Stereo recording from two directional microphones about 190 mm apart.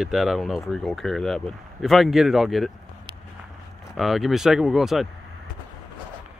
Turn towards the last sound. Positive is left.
turn(degrees=0)  # may be behind; listen again after turning